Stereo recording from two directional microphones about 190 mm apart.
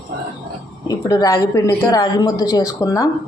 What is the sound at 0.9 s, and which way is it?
A man's voice, 20° left (ahead or behind).